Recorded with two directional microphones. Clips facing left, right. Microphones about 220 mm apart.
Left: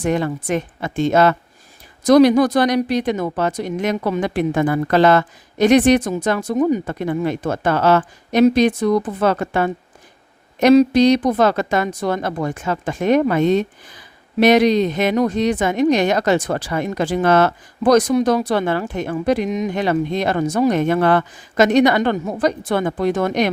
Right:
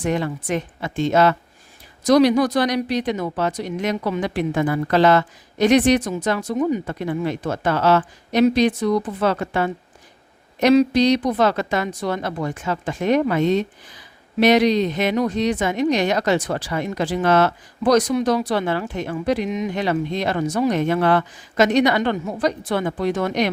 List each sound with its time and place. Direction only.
0.0 s speech: 50° left (ahead or behind)